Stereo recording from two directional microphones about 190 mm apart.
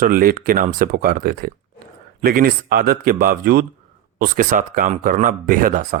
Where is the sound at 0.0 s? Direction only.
50° right (ahead or behind).